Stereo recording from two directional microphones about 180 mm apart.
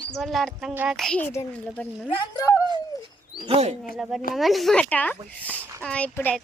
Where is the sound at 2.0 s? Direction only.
30° left (ahead or behind).